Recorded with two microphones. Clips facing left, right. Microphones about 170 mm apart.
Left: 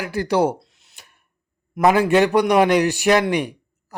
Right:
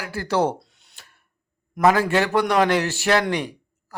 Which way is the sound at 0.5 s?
Centre (ahead or behind).